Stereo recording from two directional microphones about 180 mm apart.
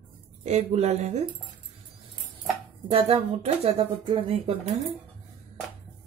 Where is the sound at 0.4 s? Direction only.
35° right (ahead or behind).